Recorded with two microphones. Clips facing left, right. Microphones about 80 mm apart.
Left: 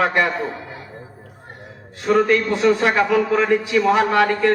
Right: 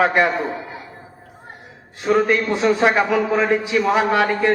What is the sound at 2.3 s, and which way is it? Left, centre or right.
A man's voice, right.